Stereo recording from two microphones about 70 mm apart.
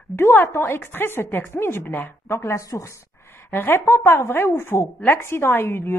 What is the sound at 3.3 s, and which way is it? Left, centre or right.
A woman's voice, left.